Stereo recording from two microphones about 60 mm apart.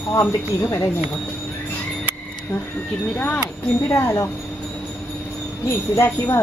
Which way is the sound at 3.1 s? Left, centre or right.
Left.